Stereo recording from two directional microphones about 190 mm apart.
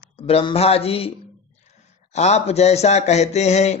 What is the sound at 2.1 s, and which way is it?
Speech, 35° left (ahead or behind).